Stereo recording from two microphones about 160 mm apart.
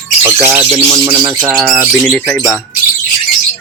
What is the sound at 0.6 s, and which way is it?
Speech, 40° right (ahead or behind).